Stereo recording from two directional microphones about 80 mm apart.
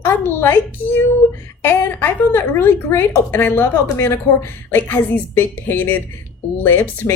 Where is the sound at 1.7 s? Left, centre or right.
Left.